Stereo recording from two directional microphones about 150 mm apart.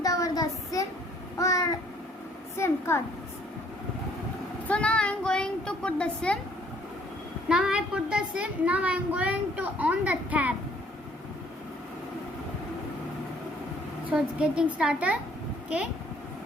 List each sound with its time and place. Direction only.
0.0 s child singing: 25° left (ahead or behind)
1.4 s babbling: 20° left (ahead or behind)
2.6 s a sound: 15° left (ahead or behind)
4.7 s speech: 10° left (ahead or behind)
7.4 s a child's voice: 5° right (ahead or behind)
14.1 s a child's voice: 5° right (ahead or behind)